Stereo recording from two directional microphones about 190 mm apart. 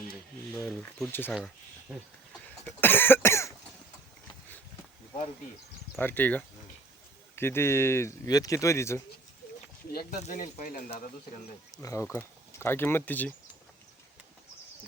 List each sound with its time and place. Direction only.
0.5 s speech: 5° left (ahead or behind)
2.6 s speech: 10° left (ahead or behind)
6.0 s speech: 10° left (ahead or behind)
9.9 s speech: 50° left (ahead or behind)
11.8 s speech: 15° left (ahead or behind)